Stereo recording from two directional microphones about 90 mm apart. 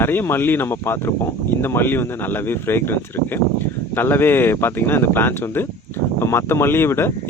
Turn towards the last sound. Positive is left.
turn(degrees=25)  # may be behind; listen again after turning